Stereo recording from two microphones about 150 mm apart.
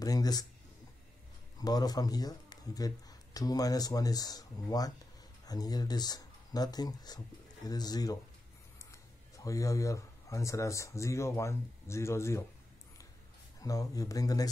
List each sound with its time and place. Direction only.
0.0 s speech: 25° left (ahead or behind)
1.6 s speech: 25° left (ahead or behind)
13.6 s speech: 25° left (ahead or behind)